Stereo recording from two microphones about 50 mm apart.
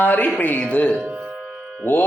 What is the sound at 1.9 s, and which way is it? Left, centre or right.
Speech, left.